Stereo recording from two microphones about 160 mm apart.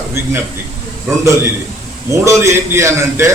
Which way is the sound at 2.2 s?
20° right (ahead or behind).